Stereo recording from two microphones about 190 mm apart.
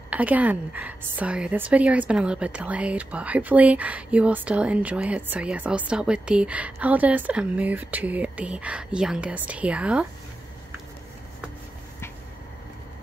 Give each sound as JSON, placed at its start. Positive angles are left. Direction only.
{"t": 0.1, "sound": "a woman's voice", "side_deg": -10}